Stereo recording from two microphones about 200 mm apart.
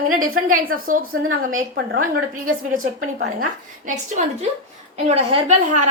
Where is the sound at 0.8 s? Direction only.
45° right (ahead or behind).